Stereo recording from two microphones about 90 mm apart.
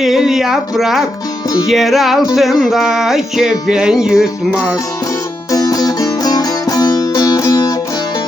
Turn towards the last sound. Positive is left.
turn(degrees=45)  # may be behind; listen again after turning